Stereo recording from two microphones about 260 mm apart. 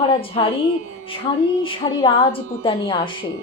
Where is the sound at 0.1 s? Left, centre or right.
Centre.